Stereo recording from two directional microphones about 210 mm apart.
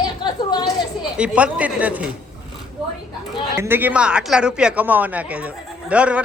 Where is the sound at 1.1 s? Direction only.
5° right (ahead or behind).